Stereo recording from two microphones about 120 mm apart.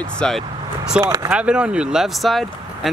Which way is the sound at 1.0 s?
25° right (ahead or behind).